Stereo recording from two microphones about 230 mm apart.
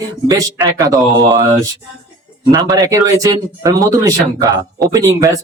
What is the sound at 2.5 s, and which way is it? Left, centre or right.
Speech, centre.